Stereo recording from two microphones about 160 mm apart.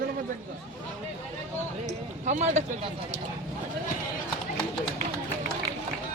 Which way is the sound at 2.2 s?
45° right (ahead or behind).